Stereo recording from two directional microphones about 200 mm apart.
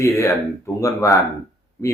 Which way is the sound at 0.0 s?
15° left (ahead or behind).